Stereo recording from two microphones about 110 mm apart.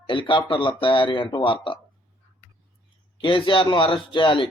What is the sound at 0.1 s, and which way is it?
Speech, 50° left (ahead or behind).